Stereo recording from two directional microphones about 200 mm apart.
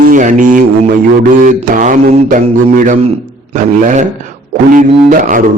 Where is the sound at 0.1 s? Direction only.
40° right (ahead or behind).